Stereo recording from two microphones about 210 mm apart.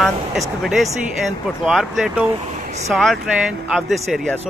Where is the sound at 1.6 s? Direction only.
Centre (ahead or behind).